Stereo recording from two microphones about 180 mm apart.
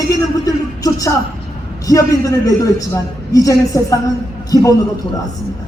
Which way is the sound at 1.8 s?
20° left (ahead or behind).